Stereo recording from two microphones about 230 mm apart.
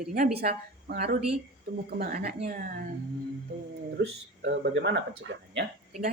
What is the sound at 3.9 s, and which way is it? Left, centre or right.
Speech, right.